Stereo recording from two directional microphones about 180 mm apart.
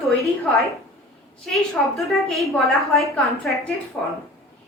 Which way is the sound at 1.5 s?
Centre (ahead or behind).